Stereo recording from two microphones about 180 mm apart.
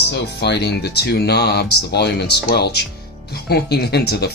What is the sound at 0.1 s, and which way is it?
Speech, 70° left (ahead or behind).